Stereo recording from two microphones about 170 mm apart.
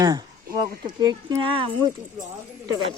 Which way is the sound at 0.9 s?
25° right (ahead or behind).